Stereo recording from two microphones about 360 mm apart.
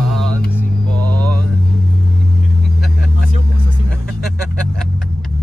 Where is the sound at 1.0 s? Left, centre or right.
Centre.